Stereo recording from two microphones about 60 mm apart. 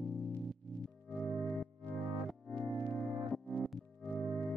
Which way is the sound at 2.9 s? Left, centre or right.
Centre.